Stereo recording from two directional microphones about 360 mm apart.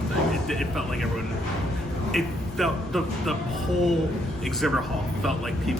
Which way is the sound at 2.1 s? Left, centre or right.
Centre.